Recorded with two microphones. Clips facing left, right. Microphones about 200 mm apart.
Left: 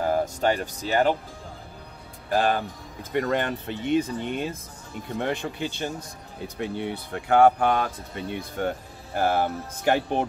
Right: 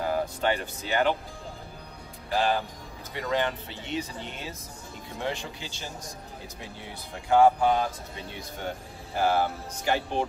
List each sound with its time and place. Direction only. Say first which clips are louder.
0.0 s speech: left 4 dB; 45° left (ahead or behind)
2.2 s speech: left 3 dB; 50° left (ahead or behind)